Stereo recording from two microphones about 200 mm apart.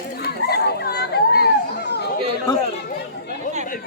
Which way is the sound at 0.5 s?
55° left (ahead or behind).